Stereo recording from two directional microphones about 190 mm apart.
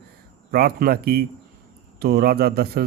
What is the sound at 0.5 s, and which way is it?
Speech, 55° right (ahead or behind).